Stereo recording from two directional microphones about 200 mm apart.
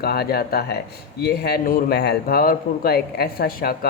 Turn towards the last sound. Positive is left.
turn(degrees=50)  # may be behind; listen again after turning